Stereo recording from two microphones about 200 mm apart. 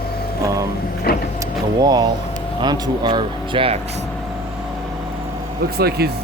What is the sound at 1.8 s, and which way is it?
Speech, 20° right (ahead or behind).